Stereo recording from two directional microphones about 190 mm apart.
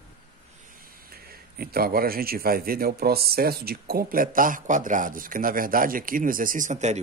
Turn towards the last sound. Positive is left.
turn(degrees=-40)  # may be behind; listen again after turning